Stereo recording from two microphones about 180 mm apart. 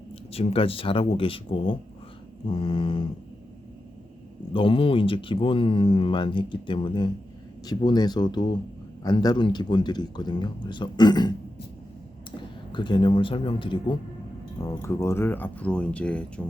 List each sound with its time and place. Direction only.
0.3 s speech: 30° left (ahead or behind)
4.5 s speech: 30° left (ahead or behind)
12.7 s speech: 25° left (ahead or behind)
14.6 s speech: 15° left (ahead or behind)